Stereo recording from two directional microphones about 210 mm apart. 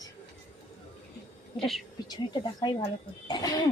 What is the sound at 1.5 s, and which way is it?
Speech, centre (ahead or behind).